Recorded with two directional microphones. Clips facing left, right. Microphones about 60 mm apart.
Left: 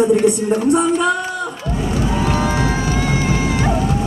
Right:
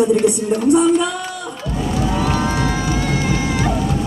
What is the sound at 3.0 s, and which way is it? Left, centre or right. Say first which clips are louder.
Music: left 1 dB; left.